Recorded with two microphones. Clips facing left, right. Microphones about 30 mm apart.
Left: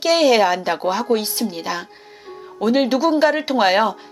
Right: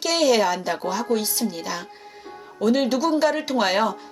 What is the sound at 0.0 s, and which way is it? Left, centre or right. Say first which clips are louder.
Speech: left 5 dB; centre.